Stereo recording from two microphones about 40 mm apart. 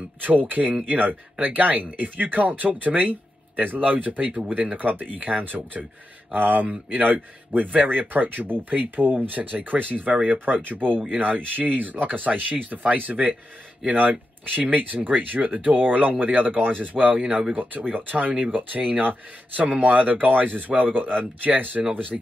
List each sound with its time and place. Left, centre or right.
0.2 s speech: right
17.3 s speech: right
17.6 s speech: right